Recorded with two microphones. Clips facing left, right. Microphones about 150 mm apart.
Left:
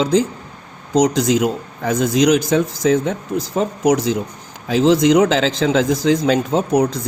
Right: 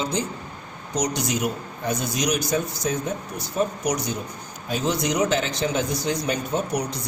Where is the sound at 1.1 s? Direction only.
90° left.